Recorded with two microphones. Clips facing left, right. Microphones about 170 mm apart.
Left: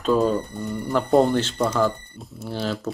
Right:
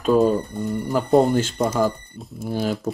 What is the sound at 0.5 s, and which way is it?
Speech, centre (ahead or behind).